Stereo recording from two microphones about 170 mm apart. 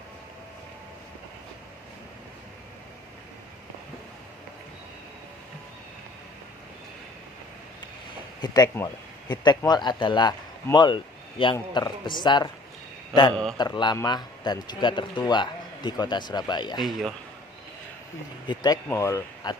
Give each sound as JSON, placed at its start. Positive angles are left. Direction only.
{"t": 8.7, "sound": "a man's voice", "side_deg": 25}
{"t": 13.3, "sound": "a man's voice", "side_deg": 5}
{"t": 13.6, "sound": "a man's voice", "side_deg": 25}
{"t": 18.5, "sound": "a man's voice", "side_deg": 25}